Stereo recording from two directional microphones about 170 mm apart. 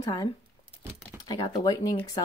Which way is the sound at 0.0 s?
25° left (ahead or behind).